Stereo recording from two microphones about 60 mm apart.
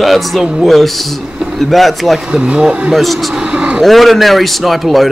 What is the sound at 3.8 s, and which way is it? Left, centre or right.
A man's voice, centre.